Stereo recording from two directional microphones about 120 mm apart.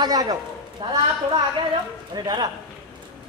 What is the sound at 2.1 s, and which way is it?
Speech, 35° right (ahead or behind).